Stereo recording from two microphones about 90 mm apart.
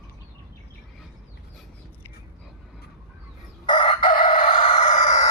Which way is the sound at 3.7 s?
65° left (ahead or behind).